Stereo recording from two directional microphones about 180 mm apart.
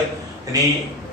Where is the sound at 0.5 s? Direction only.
20° right (ahead or behind).